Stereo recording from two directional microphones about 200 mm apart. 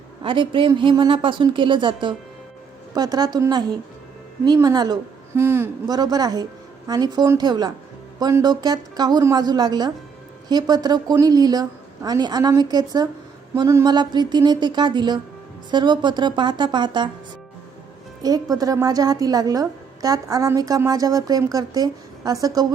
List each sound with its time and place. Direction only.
0.2 s a man's voice: 25° right (ahead or behind)
18.2 s a woman's voice: 20° right (ahead or behind)